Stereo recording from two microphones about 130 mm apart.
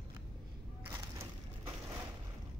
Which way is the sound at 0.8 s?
20° right (ahead or behind).